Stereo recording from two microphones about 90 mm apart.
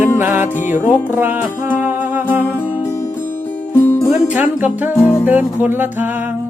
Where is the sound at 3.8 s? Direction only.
25° left (ahead or behind).